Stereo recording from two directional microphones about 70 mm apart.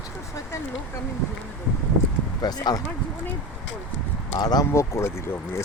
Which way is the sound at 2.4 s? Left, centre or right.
Left.